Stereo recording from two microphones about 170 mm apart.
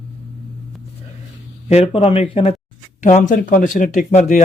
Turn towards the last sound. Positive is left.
turn(degrees=45)  # may be behind; listen again after turning